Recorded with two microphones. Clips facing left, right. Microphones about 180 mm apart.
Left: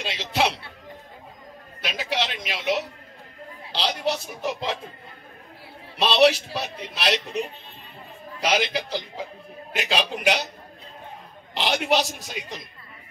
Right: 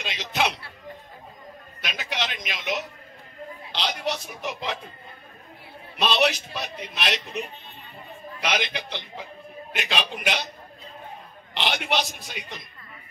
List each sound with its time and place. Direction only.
0.0 s a sound: 30° left (ahead or behind)
1.8 s a sound: 30° left (ahead or behind)
3.7 s a man's voice: 30° left (ahead or behind)
5.9 s a man's voice: 30° left (ahead or behind)
8.4 s a man's voice: 35° left (ahead or behind)
11.5 s a man's voice: 40° left (ahead or behind)